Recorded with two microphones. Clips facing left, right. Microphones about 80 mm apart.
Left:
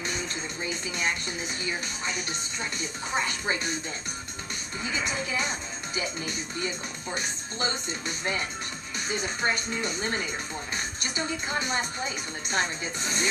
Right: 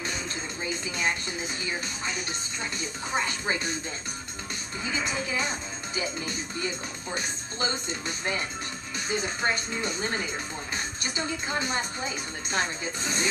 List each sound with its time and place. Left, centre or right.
0.7 s a sound: right
2.8 s speech: right
4.8 s speech: right
9.1 s speech: right